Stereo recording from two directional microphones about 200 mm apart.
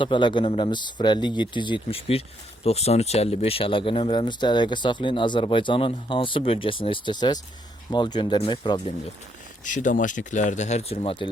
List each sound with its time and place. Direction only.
0.0 s speech: 25° left (ahead or behind)
9.6 s speech: 40° left (ahead or behind)